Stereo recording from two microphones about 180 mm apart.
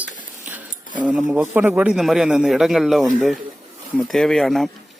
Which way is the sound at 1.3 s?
10° right (ahead or behind).